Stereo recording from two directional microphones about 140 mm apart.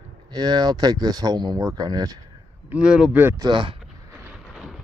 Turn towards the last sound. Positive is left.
turn(degrees=-10)  # may be behind; listen again after turning